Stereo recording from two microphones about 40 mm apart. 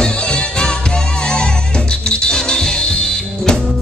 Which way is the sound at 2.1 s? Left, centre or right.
Centre.